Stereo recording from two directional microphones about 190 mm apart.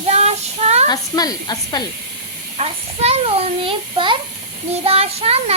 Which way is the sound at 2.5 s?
35° right (ahead or behind).